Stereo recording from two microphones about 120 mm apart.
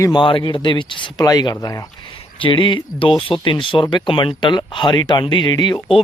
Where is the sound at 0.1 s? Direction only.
45° left (ahead or behind).